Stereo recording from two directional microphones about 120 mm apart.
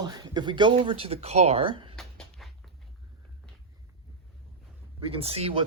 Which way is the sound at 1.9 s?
Centre (ahead or behind).